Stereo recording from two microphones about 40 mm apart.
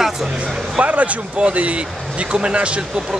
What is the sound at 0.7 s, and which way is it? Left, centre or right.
Speech, right.